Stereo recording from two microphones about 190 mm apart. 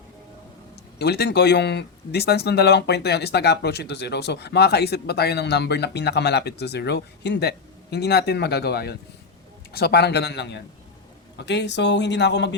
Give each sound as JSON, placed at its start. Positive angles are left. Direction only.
{"t": 0.9, "sound": "speech", "side_deg": 60}